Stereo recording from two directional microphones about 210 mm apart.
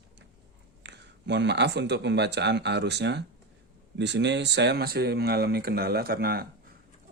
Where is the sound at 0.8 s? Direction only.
55° right (ahead or behind).